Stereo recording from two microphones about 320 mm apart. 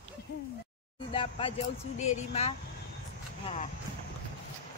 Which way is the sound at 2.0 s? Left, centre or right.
Left.